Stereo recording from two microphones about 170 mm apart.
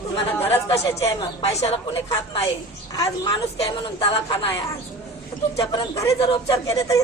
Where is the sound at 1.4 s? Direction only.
40° left (ahead or behind).